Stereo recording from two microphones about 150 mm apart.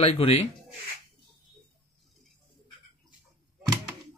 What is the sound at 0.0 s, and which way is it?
Speech, 40° left (ahead or behind).